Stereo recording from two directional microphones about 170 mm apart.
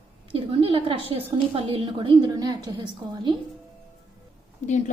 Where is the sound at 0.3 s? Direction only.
35° right (ahead or behind).